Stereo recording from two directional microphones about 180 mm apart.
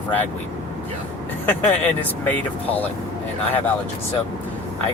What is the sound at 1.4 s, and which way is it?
Speech, 10° left (ahead or behind).